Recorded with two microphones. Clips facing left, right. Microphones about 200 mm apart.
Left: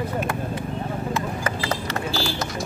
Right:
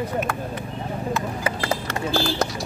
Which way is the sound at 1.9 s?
50° right (ahead or behind).